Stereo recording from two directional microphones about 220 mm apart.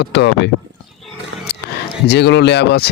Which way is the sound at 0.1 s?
50° left (ahead or behind).